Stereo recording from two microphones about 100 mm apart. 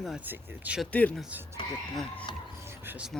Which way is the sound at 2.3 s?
50° left (ahead or behind).